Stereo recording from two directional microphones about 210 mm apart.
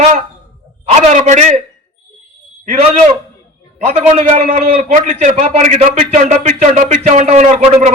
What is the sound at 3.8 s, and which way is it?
A man's voice, 30° right (ahead or behind).